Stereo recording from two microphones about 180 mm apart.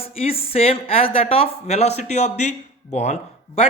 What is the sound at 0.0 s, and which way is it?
Speech, 30° left (ahead or behind).